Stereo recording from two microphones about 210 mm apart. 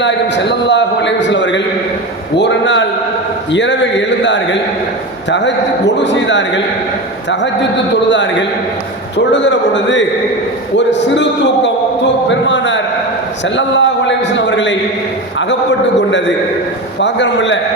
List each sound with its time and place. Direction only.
0.0 s a man's voice: 55° left (ahead or behind)
2.4 s a sound: 60° left (ahead or behind)
3.5 s a man's voice: 60° left (ahead or behind)
8.1 s a man's voice: 60° left (ahead or behind)
17.0 s a man's voice: 60° left (ahead or behind)